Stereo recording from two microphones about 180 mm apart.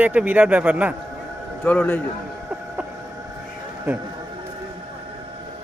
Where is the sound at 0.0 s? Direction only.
10° right (ahead or behind).